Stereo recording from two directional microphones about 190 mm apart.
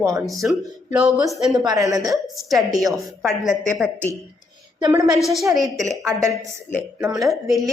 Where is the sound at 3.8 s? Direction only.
10° left (ahead or behind).